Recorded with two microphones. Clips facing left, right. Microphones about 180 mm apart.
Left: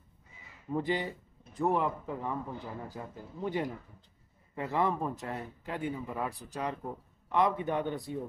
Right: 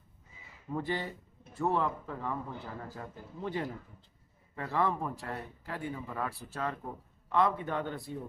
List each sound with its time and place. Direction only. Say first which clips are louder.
0.7 s a man's voice: left 3 dB; 15° left (ahead or behind)